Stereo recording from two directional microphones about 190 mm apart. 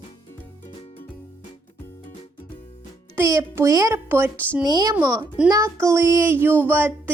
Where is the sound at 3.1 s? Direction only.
15° right (ahead or behind).